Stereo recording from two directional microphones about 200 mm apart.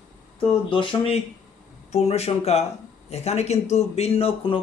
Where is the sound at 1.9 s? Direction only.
30° left (ahead or behind).